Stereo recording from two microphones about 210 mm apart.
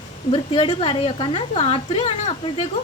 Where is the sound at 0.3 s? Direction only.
25° left (ahead or behind).